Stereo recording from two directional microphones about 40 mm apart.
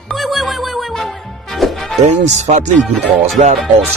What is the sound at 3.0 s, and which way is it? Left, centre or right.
Speech, centre.